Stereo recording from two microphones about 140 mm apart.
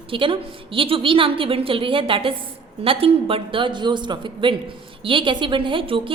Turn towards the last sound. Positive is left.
turn(degrees=-40)  # may be behind; listen again after turning